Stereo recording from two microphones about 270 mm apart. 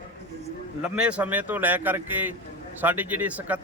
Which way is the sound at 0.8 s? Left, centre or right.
Centre.